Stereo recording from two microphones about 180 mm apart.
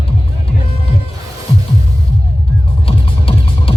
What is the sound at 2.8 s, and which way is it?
Music, 30° left (ahead or behind).